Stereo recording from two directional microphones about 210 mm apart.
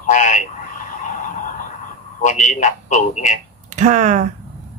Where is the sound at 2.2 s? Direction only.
35° left (ahead or behind).